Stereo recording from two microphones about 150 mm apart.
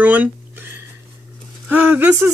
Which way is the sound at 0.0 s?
10° right (ahead or behind).